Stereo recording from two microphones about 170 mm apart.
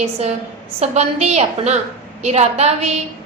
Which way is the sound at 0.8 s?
40° right (ahead or behind).